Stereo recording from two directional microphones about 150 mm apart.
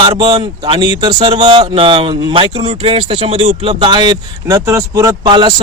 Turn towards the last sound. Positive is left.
turn(degrees=-30)  # may be behind; listen again after turning